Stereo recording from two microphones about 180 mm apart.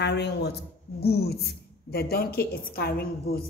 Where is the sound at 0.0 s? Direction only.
70° left (ahead or behind).